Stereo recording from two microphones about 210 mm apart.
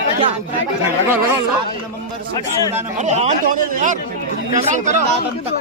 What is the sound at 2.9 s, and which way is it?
Speech, 35° right (ahead or behind).